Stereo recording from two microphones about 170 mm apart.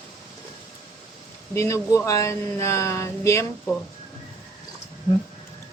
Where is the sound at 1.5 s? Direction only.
15° left (ahead or behind).